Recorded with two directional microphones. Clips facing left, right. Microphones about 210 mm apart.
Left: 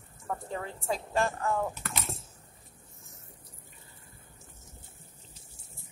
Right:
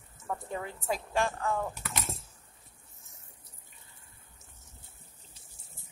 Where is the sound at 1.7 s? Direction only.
Centre (ahead or behind).